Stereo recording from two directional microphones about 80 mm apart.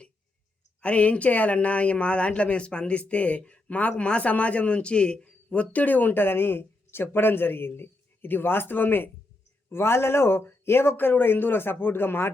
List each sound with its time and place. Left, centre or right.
0.8 s speech: centre